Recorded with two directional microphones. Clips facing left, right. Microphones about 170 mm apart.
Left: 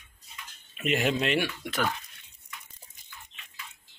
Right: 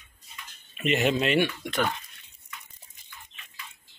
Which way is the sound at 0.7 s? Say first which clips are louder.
Right 2 dB; centre (ahead or behind).